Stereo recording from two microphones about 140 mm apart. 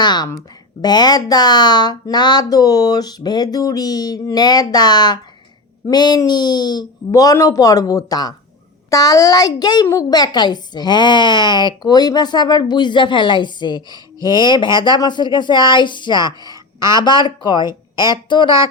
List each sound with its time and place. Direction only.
0.0 s a woman's voice: 30° left (ahead or behind)